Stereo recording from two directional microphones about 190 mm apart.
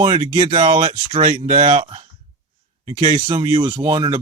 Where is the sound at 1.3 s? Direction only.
45° right (ahead or behind).